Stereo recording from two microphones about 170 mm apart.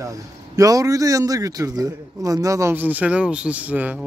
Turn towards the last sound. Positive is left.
turn(degrees=-10)  # may be behind; listen again after turning